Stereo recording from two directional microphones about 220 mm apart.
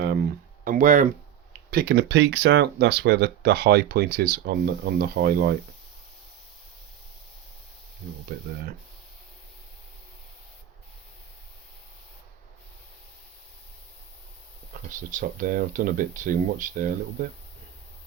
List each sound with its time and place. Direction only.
0.0 s a sound: 45° right (ahead or behind)
1.7 s speech: 45° right (ahead or behind)
14.7 s speech: 35° right (ahead or behind)